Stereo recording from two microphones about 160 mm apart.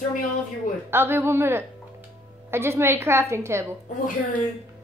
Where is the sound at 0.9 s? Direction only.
15° right (ahead or behind).